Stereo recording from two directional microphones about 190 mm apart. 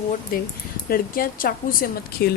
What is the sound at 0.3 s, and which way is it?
A woman's voice, 50° left (ahead or behind).